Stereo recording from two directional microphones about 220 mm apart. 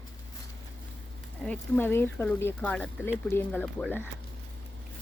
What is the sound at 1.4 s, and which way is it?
Speech, 5° left (ahead or behind).